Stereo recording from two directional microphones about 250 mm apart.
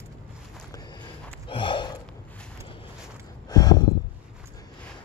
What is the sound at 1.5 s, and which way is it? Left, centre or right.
Gasp, centre.